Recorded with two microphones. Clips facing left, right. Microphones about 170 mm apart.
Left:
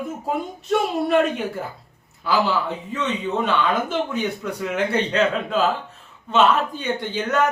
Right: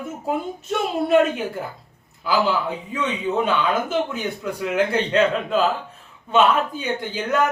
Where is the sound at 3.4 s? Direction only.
5° right (ahead or behind).